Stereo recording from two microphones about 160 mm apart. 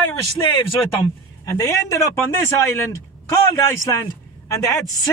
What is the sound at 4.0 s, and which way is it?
Speech, 20° left (ahead or behind).